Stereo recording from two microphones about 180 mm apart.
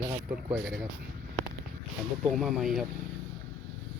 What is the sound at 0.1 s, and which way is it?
Speech, 25° right (ahead or behind).